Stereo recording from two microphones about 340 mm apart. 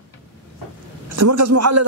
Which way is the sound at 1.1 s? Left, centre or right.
Right.